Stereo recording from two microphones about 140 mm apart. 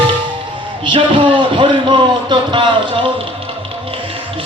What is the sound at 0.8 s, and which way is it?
Music, 35° right (ahead or behind).